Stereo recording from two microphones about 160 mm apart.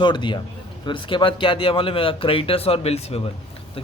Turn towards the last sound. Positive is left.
turn(degrees=40)  # may be behind; listen again after turning